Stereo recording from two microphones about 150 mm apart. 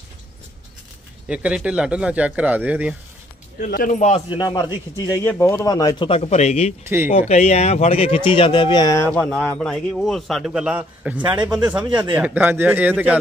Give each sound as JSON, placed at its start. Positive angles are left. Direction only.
{"t": 1.3, "sound": "speech", "side_deg": -5}
{"t": 3.7, "sound": "speech", "side_deg": 60}
{"t": 4.3, "sound": "a man's voice", "side_deg": 30}
{"t": 9.2, "sound": "a man's voice", "side_deg": 5}